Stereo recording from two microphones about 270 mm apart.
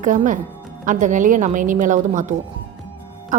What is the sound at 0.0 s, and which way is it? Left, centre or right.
A woman's voice, right.